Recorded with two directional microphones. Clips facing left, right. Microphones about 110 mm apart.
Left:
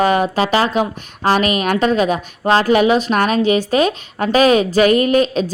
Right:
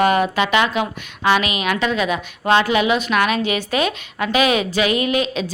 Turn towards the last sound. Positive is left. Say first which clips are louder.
# left 6 dB
turn(degrees=40)  # may be behind; listen again after turning